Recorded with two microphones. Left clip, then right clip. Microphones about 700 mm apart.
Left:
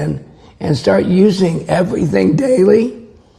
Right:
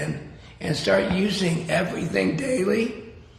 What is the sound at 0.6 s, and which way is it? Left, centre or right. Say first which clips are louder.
A man's voice: left 8 dB; left.